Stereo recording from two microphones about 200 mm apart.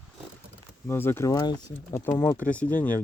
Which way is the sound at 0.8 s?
10° left (ahead or behind).